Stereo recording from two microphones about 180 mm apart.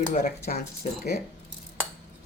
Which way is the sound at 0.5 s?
50° left (ahead or behind).